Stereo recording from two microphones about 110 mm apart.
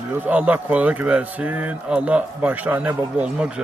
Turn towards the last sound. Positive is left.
turn(degrees=-15)  # may be behind; listen again after turning